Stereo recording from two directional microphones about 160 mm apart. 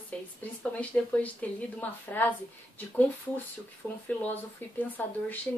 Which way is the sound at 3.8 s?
20° left (ahead or behind).